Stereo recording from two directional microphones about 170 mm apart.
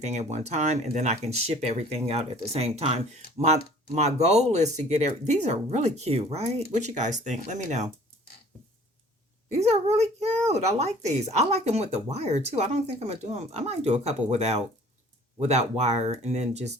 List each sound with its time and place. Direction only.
0.0 s speech: 40° right (ahead or behind)
9.5 s speech: 40° right (ahead or behind)